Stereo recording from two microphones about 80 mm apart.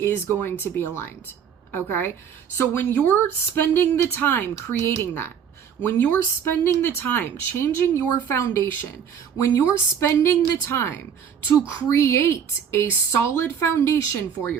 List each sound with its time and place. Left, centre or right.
0.0 s speech: left